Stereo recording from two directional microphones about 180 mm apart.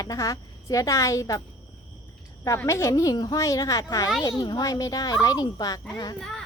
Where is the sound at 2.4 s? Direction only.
15° left (ahead or behind).